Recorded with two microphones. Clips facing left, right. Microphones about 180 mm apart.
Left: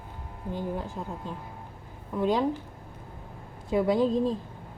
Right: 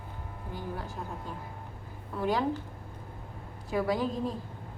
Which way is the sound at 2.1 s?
20° left (ahead or behind).